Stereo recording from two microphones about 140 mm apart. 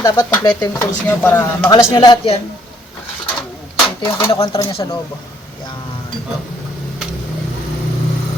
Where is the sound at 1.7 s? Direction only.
30° left (ahead or behind).